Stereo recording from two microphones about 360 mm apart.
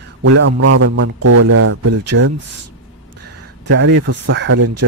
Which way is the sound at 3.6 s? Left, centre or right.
Right.